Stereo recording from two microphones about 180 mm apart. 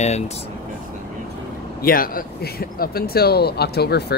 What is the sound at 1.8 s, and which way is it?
Speech, 55° left (ahead or behind).